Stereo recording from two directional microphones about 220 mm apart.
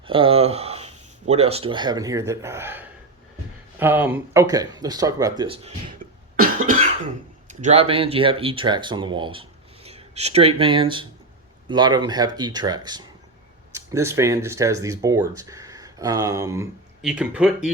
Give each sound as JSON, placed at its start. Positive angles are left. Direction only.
{"t": 0.0, "sound": "speech", "side_deg": -25}
{"t": 6.0, "sound": "cough", "side_deg": -35}
{"t": 7.4, "sound": "speech", "side_deg": -30}
{"t": 17.0, "sound": "speech", "side_deg": -5}